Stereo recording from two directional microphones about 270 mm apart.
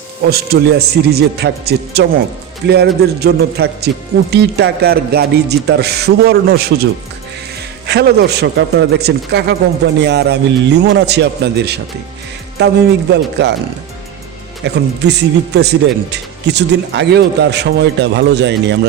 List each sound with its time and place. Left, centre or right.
0.3 s speech: right
7.9 s speech: right
14.6 s speech: right